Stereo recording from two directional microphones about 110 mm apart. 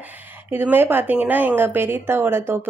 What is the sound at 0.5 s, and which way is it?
A woman's voice, 20° right (ahead or behind).